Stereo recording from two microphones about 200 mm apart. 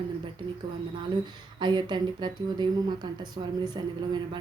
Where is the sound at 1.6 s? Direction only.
20° right (ahead or behind).